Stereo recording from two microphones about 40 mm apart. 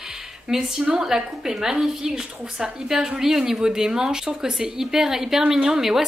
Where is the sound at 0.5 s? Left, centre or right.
Centre.